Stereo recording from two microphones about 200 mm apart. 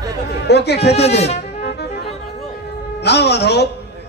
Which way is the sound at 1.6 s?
55° left (ahead or behind).